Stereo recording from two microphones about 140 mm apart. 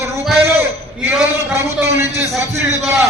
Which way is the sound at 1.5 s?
20° right (ahead or behind).